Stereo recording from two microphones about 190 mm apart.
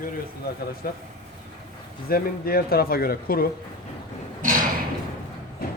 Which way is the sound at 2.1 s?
50° left (ahead or behind).